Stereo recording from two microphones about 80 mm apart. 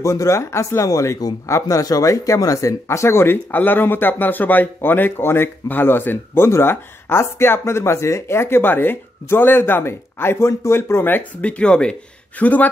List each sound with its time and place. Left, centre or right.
0.0 s speech: left